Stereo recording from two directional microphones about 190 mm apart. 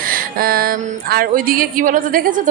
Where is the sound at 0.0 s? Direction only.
50° right (ahead or behind).